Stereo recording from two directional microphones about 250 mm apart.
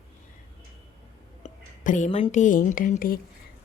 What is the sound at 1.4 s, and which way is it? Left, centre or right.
A woman's voice, left.